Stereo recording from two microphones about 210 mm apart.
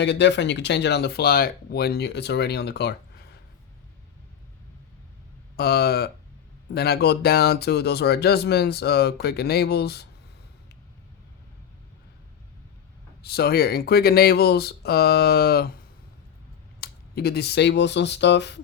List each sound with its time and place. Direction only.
0.0 s speech: 55° left (ahead or behind)
5.5 s speech: 50° left (ahead or behind)
13.2 s speech: 50° left (ahead or behind)
16.8 s speech: 50° left (ahead or behind)